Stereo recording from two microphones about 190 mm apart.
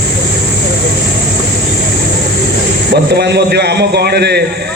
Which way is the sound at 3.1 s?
60° right (ahead or behind).